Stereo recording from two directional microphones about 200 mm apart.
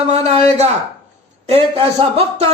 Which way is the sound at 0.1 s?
35° right (ahead or behind).